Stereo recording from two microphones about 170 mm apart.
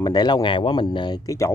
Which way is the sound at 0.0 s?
25° left (ahead or behind).